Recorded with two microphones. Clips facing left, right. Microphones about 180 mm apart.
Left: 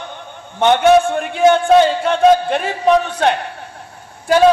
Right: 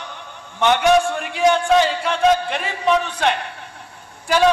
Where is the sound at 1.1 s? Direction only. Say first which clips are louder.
Left 5 dB; 35° left (ahead or behind).